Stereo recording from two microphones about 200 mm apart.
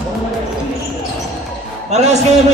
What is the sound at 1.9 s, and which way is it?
Speech, 35° right (ahead or behind).